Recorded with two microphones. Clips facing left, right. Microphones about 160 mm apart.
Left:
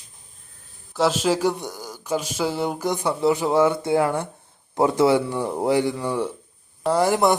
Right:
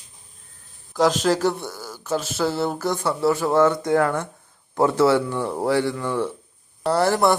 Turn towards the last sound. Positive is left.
turn(degrees=15)  # may be behind; listen again after turning